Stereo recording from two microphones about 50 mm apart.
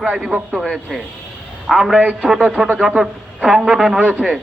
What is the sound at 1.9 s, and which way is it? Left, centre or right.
A man's voice, centre.